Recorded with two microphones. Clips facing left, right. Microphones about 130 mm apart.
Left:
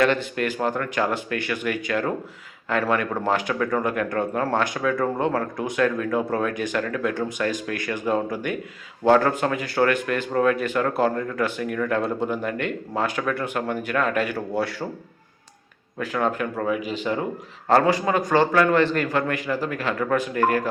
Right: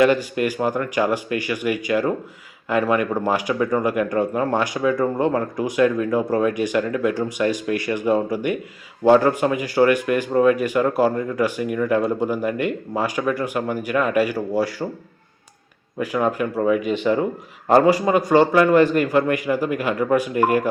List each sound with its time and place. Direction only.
0.0 s speech: 10° right (ahead or behind)
16.0 s speech: 10° right (ahead or behind)